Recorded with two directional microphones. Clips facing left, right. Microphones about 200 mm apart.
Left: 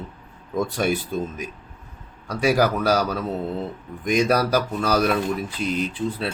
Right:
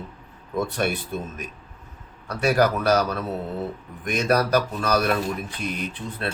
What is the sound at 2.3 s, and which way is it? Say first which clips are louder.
Speech: left 1 dB; 10° left (ahead or behind).